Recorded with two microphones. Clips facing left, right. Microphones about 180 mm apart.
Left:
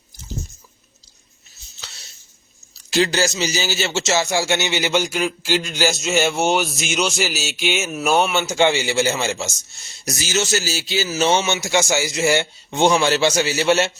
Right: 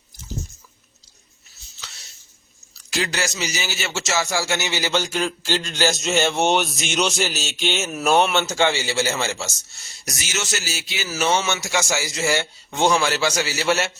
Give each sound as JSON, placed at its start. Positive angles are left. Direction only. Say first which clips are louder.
{"t": 2.9, "sound": "a man's voice", "louder": "left 7 dB", "side_deg": 30}
{"t": 10.1, "sound": "a man's voice", "louder": "left 7 dB", "side_deg": 30}